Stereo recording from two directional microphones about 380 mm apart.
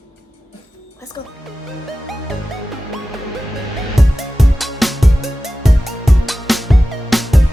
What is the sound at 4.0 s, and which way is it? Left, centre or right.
Music, centre.